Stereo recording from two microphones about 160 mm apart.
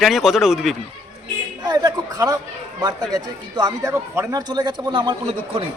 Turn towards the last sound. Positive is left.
turn(degrees=-30)  # may be behind; listen again after turning